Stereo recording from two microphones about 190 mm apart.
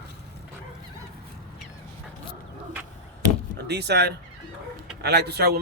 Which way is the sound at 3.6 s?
60° right (ahead or behind).